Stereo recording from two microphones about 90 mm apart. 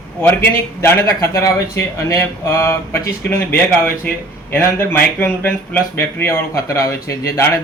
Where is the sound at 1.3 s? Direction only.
35° left (ahead or behind).